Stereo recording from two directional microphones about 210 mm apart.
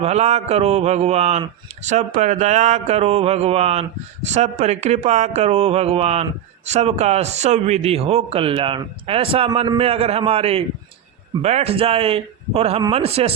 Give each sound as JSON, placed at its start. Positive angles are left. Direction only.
{"t": 0.0, "sound": "a man's voice", "side_deg": -30}